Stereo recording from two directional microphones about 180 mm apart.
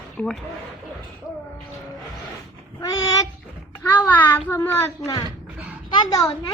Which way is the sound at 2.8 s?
20° left (ahead or behind).